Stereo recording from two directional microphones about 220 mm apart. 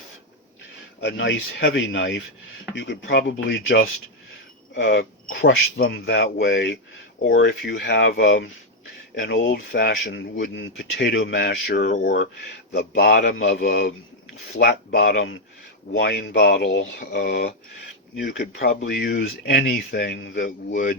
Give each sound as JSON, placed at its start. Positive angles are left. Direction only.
{"t": 1.0, "sound": "speech", "side_deg": 55}